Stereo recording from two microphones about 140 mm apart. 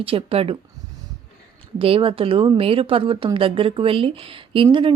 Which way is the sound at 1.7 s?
40° right (ahead or behind).